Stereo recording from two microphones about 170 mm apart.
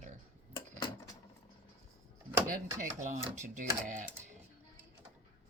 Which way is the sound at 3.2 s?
45° right (ahead or behind).